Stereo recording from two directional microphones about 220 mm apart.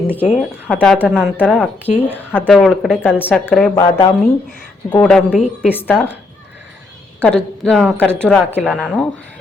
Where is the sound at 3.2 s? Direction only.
10° left (ahead or behind).